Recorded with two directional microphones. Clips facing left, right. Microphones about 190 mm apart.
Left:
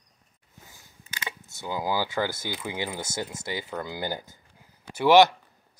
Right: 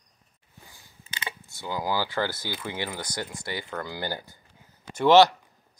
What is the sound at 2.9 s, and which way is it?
Speech, 25° left (ahead or behind).